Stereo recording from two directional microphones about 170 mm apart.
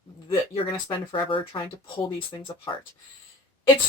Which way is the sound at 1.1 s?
30° left (ahead or behind).